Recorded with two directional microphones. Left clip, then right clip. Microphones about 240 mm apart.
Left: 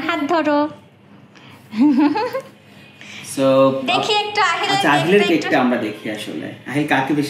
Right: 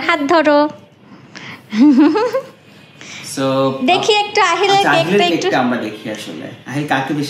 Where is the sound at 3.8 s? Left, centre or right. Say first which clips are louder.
Right 4 dB; right.